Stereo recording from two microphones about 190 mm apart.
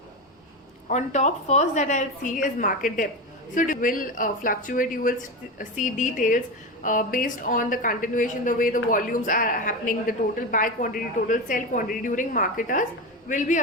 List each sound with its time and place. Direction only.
0.9 s a woman's voice: 40° left (ahead or behind)